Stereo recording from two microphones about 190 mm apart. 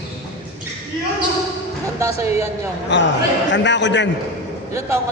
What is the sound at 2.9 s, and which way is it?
A man's voice, 70° left (ahead or behind).